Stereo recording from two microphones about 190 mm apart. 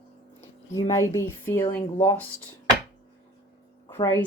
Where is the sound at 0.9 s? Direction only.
15° left (ahead or behind).